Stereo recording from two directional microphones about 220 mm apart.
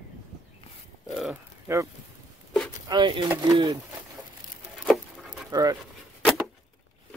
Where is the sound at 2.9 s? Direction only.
20° right (ahead or behind).